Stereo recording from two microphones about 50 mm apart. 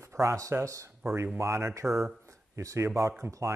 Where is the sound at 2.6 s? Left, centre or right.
Right.